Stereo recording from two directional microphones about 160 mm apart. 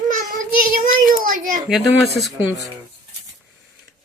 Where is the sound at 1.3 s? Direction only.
60° right (ahead or behind).